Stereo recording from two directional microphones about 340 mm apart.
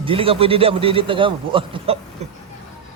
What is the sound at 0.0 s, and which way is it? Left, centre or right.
A man's voice, centre.